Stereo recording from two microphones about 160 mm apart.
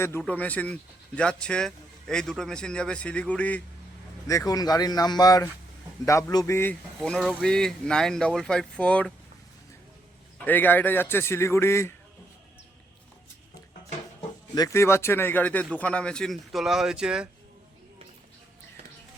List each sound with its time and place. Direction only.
0.2 s speech: 10° left (ahead or behind)
4.3 s speech: 20° left (ahead or behind)
10.3 s speech: 10° left (ahead or behind)
14.2 s speech: 25° left (ahead or behind); by 17.2 s 5° right (ahead or behind)